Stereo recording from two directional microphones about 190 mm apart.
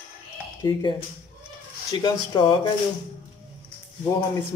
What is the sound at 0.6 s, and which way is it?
Speech, 20° left (ahead or behind).